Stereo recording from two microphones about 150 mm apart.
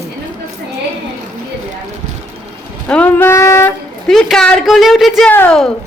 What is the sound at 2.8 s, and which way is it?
Speech, 10° left (ahead or behind).